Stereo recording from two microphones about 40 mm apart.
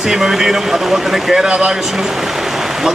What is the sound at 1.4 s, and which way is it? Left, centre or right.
Speech, right.